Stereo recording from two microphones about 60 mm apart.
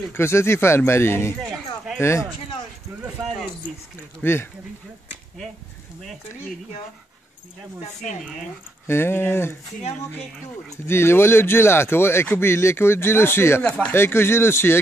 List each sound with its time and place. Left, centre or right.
0.1 s speech: left
4.2 s speech: left
8.8 s speech: left
10.9 s speech: left
13.7 s speech: centre
13.9 s speech: left